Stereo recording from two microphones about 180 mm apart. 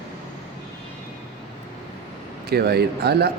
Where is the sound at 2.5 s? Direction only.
60° right (ahead or behind).